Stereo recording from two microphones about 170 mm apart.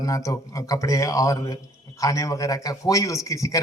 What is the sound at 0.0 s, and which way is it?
A man's voice, 20° left (ahead or behind).